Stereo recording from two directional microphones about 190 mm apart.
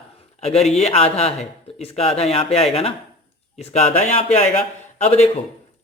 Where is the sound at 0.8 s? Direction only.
35° left (ahead or behind).